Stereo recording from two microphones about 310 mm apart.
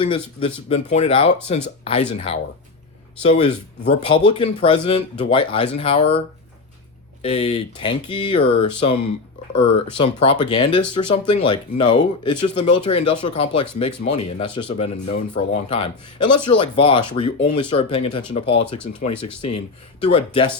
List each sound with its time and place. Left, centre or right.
0.0 s speech: centre
18.9 s speech: left
20.1 s speech: centre